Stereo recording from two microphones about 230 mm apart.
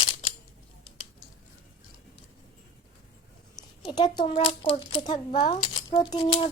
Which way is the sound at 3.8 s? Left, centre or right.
Centre.